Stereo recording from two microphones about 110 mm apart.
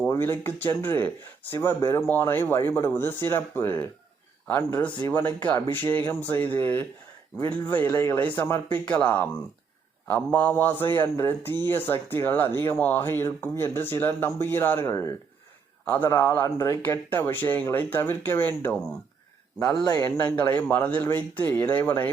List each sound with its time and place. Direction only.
0.1 s a man's voice: 20° left (ahead or behind)
19.5 s speech: 35° left (ahead or behind)
20.7 s speech: 15° left (ahead or behind)